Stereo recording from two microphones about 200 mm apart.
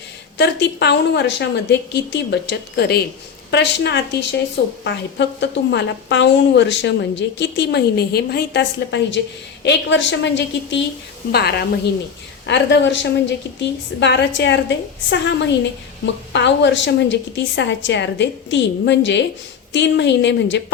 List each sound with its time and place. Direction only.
0.3 s a woman's voice: 60° left (ahead or behind)